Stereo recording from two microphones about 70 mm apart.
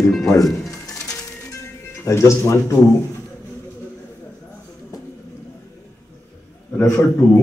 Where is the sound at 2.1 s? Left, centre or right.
Left.